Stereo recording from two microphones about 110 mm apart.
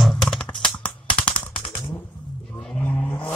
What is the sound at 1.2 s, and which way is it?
Machine gun, 50° left (ahead or behind).